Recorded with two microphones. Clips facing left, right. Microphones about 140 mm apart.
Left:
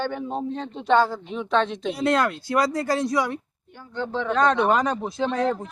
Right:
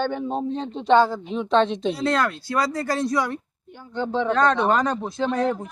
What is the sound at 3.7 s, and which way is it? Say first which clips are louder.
Speech: right 3 dB; 20° right (ahead or behind).